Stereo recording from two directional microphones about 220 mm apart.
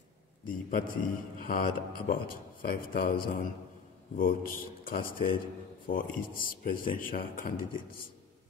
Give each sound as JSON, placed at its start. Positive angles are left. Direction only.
{"t": 0.5, "sound": "speech", "side_deg": 40}